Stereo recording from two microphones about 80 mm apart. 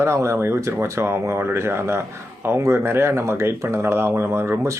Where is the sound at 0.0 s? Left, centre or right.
Right.